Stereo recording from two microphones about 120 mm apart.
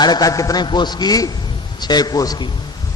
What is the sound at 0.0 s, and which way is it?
A man's voice, 35° left (ahead or behind).